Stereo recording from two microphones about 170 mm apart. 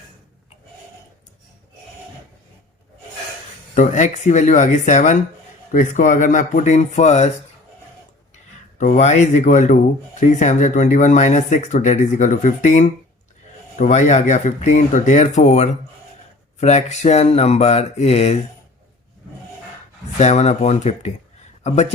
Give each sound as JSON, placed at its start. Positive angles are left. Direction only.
{"t": 3.8, "sound": "speech", "side_deg": 45}
{"t": 8.8, "sound": "speech", "side_deg": 45}
{"t": 16.6, "sound": "mantra", "side_deg": 40}
{"t": 20.1, "sound": "mantra", "side_deg": 40}
{"t": 21.6, "sound": "speech", "side_deg": 40}